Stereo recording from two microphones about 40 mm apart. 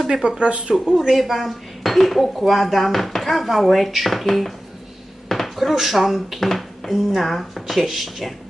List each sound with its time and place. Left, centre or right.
0.1 s speech: right
0.7 s speech: centre
1.1 s speech: centre